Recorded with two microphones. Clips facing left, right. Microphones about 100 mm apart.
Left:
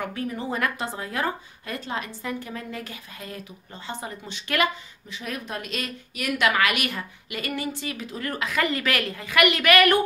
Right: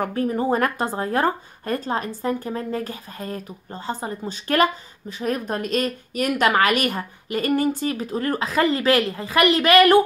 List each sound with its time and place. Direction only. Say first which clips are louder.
0.0 s speech: right 8 dB; 45° right (ahead or behind)